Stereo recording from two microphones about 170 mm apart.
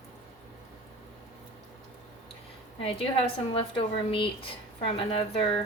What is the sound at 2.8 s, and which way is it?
A woman's voice, 30° left (ahead or behind).